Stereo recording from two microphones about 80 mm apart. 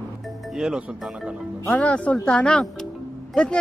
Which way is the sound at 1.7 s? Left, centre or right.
Centre.